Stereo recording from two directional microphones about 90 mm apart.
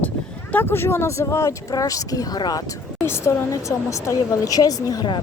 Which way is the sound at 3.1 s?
30° left (ahead or behind).